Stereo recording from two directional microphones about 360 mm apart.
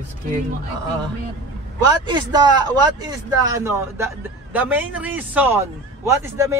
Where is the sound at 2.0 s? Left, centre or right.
Centre.